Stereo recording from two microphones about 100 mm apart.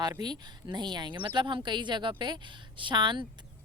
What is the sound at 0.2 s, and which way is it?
Speech, 45° right (ahead or behind).